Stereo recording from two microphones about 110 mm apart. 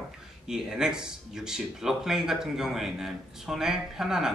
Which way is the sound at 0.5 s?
5° right (ahead or behind).